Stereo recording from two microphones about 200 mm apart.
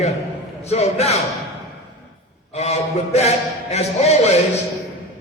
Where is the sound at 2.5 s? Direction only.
35° left (ahead or behind).